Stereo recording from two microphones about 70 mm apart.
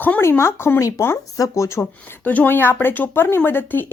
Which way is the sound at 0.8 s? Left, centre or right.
Left.